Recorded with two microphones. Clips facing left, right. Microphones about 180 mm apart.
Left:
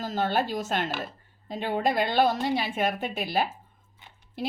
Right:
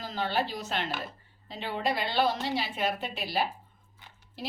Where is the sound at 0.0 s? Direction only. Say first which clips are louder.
Left 4 dB; 45° left (ahead or behind).